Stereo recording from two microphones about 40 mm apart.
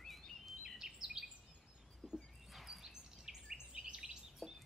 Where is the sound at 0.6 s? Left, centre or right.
Centre.